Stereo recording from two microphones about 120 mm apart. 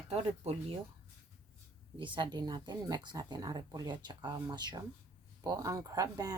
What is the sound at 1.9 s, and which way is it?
Speech, 40° right (ahead or behind).